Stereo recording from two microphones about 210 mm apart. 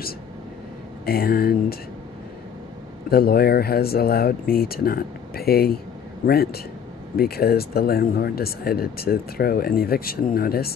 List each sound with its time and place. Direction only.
1.0 s speech: 45° left (ahead or behind)
3.1 s speech: 45° left (ahead or behind)